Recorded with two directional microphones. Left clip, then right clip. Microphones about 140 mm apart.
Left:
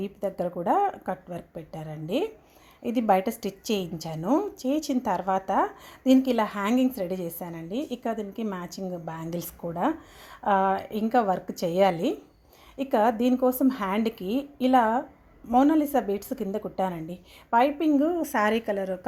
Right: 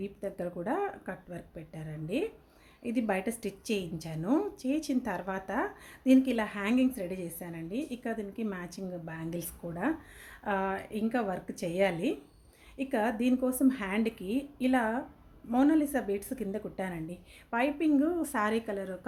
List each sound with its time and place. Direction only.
0.0 s a woman's voice: 25° left (ahead or behind)
4.2 s a woman's voice: 15° left (ahead or behind)